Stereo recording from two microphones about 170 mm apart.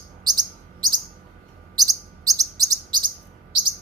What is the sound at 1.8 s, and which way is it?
Chirp, 20° right (ahead or behind).